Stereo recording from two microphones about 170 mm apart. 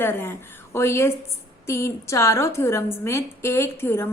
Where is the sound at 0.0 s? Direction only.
15° left (ahead or behind).